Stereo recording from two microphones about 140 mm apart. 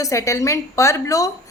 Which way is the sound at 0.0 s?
20° left (ahead or behind).